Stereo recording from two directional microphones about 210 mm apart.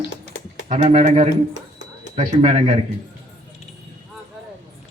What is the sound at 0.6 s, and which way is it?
Speech, 35° right (ahead or behind).